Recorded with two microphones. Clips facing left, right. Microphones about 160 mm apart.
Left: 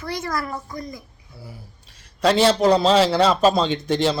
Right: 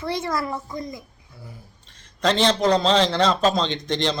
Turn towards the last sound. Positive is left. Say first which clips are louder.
# left 4 dB
turn(degrees=5)  # may be behind; listen again after turning